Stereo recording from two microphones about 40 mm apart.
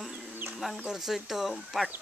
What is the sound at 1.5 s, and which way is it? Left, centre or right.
Speech, centre.